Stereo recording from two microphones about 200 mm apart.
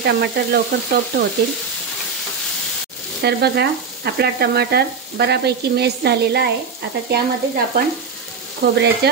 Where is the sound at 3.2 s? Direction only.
55° right (ahead or behind).